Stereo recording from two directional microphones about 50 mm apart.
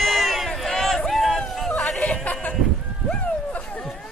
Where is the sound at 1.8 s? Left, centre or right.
Centre.